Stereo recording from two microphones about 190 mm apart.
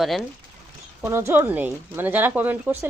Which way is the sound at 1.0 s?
15° right (ahead or behind).